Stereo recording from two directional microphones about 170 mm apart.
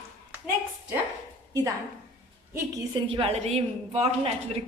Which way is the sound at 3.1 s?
35° right (ahead or behind).